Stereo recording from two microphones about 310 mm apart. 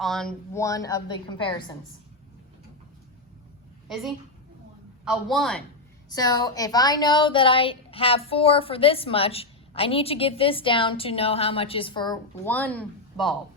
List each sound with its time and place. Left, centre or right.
0.0 s a woman's voice: centre
3.8 s a woman's voice: centre
6.1 s a woman's voice: centre